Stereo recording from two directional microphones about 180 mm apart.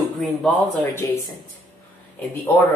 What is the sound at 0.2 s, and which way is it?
Speech, 5° left (ahead or behind).